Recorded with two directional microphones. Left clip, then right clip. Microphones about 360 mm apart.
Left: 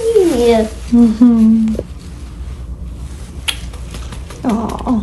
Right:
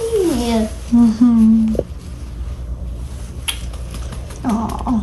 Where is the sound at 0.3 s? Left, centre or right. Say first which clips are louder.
Left 8 dB; centre.